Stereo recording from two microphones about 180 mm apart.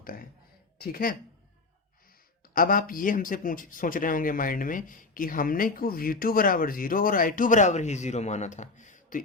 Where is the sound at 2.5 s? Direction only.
50° left (ahead or behind).